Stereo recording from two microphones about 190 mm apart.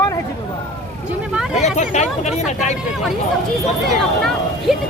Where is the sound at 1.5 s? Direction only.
40° left (ahead or behind).